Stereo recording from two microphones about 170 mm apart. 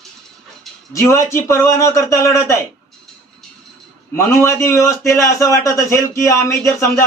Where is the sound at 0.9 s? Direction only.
15° left (ahead or behind).